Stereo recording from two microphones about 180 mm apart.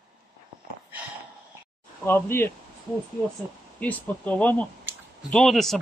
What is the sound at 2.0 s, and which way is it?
Speech, 10° left (ahead or behind).